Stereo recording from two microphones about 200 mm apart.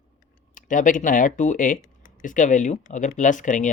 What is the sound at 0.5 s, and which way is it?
Speech, 40° left (ahead or behind).